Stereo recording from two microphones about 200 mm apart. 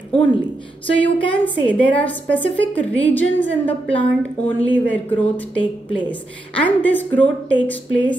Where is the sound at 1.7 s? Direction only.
5° left (ahead or behind).